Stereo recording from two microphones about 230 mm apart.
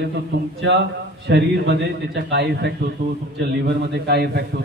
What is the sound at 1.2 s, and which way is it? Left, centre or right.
A man's voice, right.